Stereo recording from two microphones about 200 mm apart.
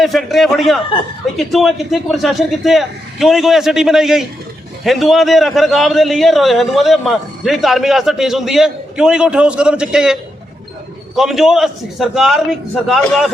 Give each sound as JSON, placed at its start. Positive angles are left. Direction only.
{"t": 0.0, "sound": "a man's voice", "side_deg": 0}
{"t": 0.9, "sound": "speech", "side_deg": 25}
{"t": 1.4, "sound": "a man's voice", "side_deg": 0}